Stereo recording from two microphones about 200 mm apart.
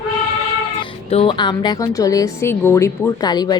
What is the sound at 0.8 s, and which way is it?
A woman's voice, 25° left (ahead or behind).